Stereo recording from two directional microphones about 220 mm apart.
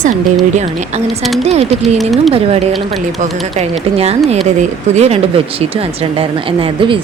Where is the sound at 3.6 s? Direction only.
30° right (ahead or behind).